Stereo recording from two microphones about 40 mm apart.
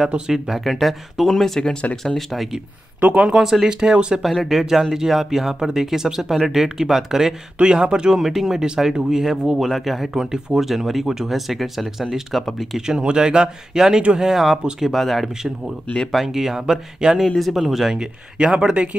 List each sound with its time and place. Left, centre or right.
0.3 s speech: centre
0.7 s speech: centre
2.0 s speech: centre
4.2 s speech: centre
7.6 s speech: right
8.2 s speech: centre
9.6 s speech: centre
12.7 s speech: centre
15.2 s speech: centre
17.4 s speech: centre
17.9 s speech: right